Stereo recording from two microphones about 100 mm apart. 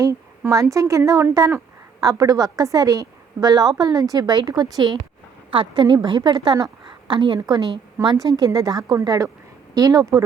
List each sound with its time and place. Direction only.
0.0 s a woman's voice: 35° right (ahead or behind)